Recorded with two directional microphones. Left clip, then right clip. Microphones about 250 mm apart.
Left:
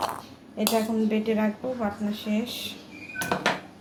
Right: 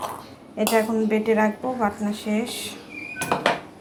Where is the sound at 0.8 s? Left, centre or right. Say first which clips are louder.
Right 6 dB; centre.